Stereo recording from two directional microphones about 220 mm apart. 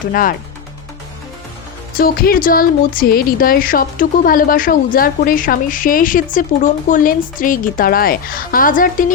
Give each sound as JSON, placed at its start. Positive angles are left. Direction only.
{"t": 0.1, "sound": "speech", "side_deg": 40}
{"t": 2.0, "sound": "speech", "side_deg": 40}